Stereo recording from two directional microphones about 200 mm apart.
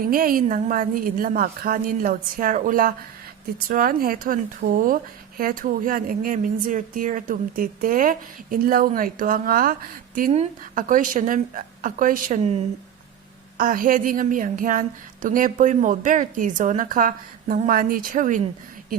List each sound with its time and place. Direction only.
0.0 s a woman's voice: 45° right (ahead or behind)
13.6 s a woman's voice: 45° right (ahead or behind)